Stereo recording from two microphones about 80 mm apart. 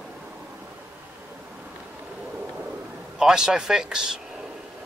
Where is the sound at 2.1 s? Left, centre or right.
Centre.